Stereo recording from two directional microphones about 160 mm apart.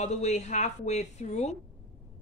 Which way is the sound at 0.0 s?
45° left (ahead or behind).